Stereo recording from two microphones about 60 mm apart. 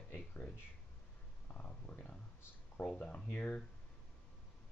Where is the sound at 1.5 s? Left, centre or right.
Left.